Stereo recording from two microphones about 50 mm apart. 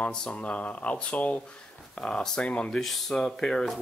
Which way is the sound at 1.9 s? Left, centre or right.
Centre.